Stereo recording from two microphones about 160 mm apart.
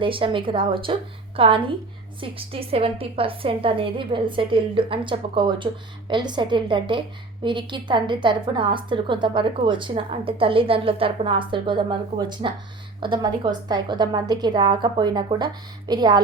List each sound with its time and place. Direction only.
0.0 s a woman's voice: 35° right (ahead or behind)